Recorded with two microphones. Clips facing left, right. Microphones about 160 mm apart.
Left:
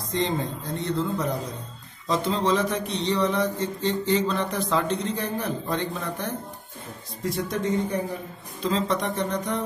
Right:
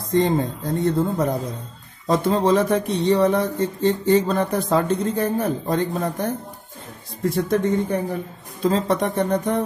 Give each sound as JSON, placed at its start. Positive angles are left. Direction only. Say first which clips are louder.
{"t": 0.1, "sound": "speech", "louder": "right 7 dB", "side_deg": -50}